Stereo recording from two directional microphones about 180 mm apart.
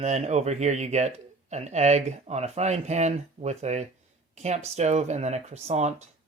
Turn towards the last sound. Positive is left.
turn(degrees=-40)  # may be behind; listen again after turning